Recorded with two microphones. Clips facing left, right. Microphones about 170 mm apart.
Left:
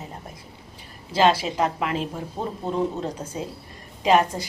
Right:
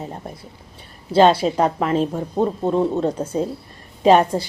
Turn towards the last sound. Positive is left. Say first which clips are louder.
# right 5 dB
turn(degrees=-30)  # may be behind; listen again after turning